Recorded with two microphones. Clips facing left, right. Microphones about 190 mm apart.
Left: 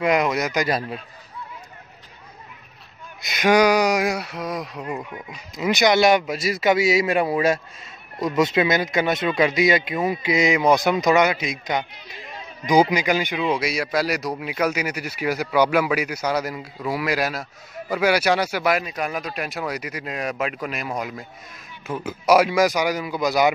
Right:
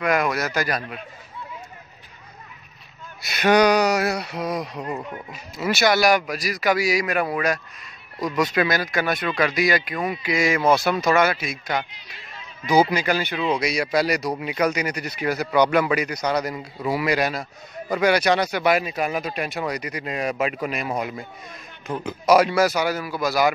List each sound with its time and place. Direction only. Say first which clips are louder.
0.0 s a man's voice: left 2 dB; 20° left (ahead or behind)
0.7 s a man's voice: left 3 dB; 30° left (ahead or behind)
3.2 s speech: even; 15° left (ahead or behind)
4.3 s speech: right 2 dB; centre (ahead or behind)
4.8 s a man's voice: even; 10° left (ahead or behind)